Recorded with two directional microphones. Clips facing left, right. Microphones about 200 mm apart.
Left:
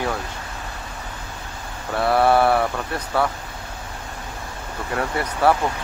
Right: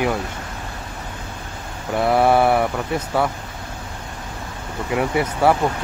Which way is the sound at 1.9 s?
15° right (ahead or behind).